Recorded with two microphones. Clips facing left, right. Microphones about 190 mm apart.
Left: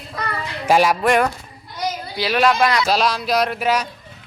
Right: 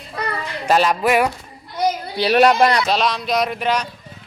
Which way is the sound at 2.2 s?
35° right (ahead or behind).